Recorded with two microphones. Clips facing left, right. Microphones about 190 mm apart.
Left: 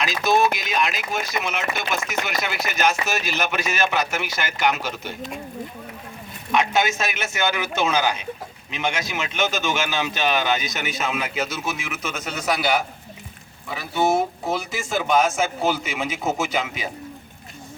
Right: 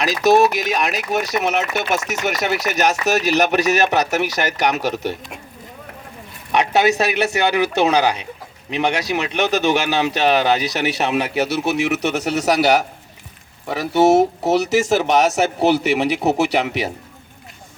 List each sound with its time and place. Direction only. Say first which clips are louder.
0.0 s speech: right 6 dB; 40° right (ahead or behind)
6.6 s speech: right 6 dB; 35° right (ahead or behind)
10.6 s speech: right 7 dB; 70° right (ahead or behind)